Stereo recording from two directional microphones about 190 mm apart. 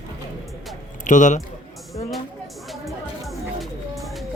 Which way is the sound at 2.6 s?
Centre (ahead or behind).